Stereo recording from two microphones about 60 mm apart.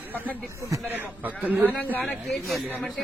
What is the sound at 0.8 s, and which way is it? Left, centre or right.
Speech, right.